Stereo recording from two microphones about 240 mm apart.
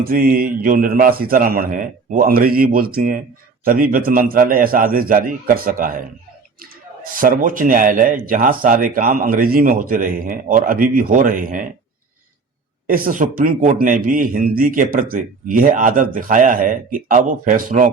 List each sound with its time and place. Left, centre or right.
0.0 s a man's voice: right
12.9 s a man's voice: right